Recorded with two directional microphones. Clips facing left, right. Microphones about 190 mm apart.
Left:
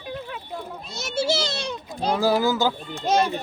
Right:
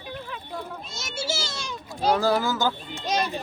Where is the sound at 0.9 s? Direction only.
60° left (ahead or behind).